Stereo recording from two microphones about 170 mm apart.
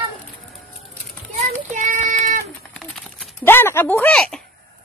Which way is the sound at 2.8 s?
Centre (ahead or behind).